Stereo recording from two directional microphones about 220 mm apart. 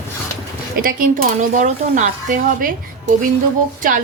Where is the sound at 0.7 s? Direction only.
40° right (ahead or behind).